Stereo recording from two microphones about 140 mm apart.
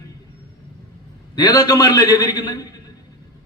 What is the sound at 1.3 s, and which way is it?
A man's voice, 30° left (ahead or behind).